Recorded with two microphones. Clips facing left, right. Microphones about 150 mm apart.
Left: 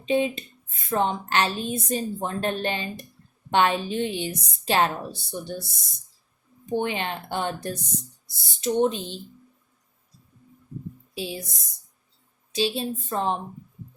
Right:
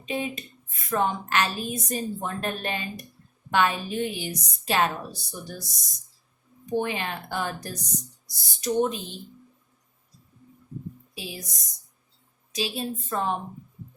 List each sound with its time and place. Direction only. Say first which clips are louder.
0.0 s a woman's voice: left 7 dB; 30° left (ahead or behind)
11.1 s a woman's voice: left 8 dB; 30° left (ahead or behind)